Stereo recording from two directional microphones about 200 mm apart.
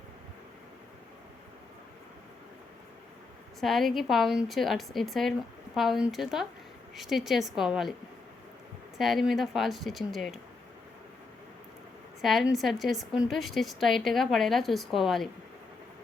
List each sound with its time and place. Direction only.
3.6 s a woman's voice: centre (ahead or behind)
9.0 s a woman's voice: centre (ahead or behind)
12.2 s a woman's voice: centre (ahead or behind)